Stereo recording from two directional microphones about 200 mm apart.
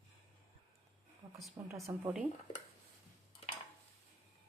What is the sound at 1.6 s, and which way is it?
Speech, 20° right (ahead or behind).